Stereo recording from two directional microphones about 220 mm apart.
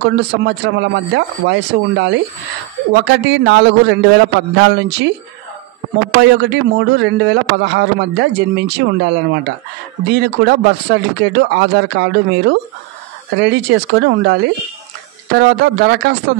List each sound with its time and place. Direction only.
0.0 s a man's voice: 50° right (ahead or behind)
6.2 s a man's voice: 50° right (ahead or behind)